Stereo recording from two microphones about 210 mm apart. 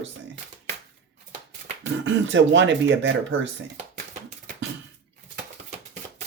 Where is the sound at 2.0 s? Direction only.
60° right (ahead or behind).